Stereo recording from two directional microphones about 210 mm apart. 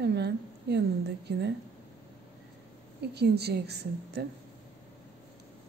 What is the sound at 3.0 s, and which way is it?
A woman's voice, 50° right (ahead or behind).